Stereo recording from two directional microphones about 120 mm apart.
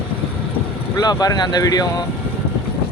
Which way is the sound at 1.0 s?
30° left (ahead or behind).